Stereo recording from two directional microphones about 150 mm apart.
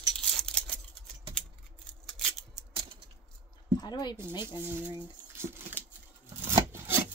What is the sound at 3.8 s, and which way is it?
Speech, 25° left (ahead or behind).